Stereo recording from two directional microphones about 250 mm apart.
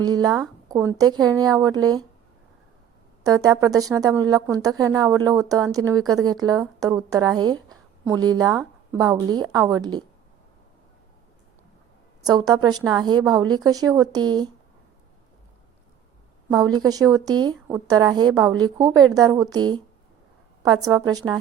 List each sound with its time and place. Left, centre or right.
0.0 s a woman's voice: centre
3.2 s a woman's voice: centre
12.2 s a woman's voice: centre
16.5 s a woman's voice: centre
20.8 s a woman's voice: centre